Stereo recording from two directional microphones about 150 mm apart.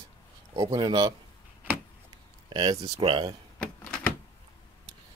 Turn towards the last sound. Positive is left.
turn(degrees=5)  # may be behind; listen again after turning